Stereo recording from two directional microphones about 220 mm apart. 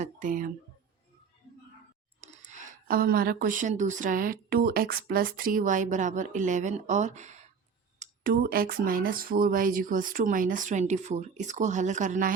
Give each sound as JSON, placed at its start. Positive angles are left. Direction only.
{"t": 0.0, "sound": "speech", "side_deg": -35}
{"t": 2.2, "sound": "speech", "side_deg": -35}
{"t": 7.9, "sound": "a sound", "side_deg": -35}
{"t": 8.3, "sound": "speech", "side_deg": -40}